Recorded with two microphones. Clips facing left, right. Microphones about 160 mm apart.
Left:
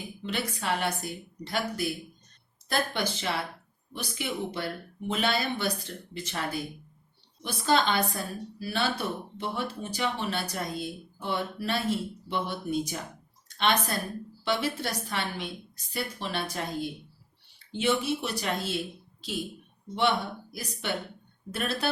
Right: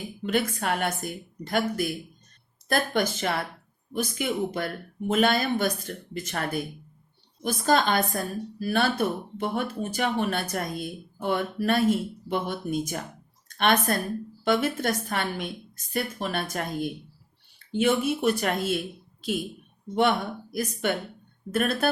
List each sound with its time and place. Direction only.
0.2 s a woman's voice: 50° right (ahead or behind)
17.7 s a woman's voice: 50° right (ahead or behind)
20.0 s a woman's voice: 50° right (ahead or behind)